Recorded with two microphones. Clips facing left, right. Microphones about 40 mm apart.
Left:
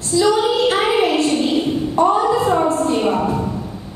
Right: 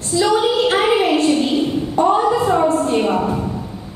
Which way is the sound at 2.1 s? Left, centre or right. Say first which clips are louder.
Right 2 dB; right.